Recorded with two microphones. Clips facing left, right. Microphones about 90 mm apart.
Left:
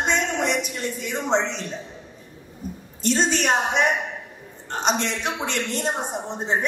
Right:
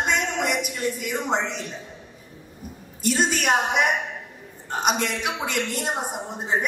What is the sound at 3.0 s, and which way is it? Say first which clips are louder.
A man's voice: left 1 dB; 5° right (ahead or behind).